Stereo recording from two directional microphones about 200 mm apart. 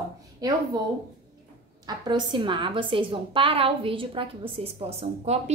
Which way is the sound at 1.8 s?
20° right (ahead or behind).